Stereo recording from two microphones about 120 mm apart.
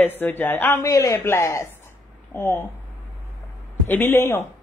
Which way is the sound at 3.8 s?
15° left (ahead or behind).